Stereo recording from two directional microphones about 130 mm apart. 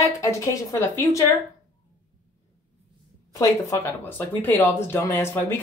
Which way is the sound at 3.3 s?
20° left (ahead or behind).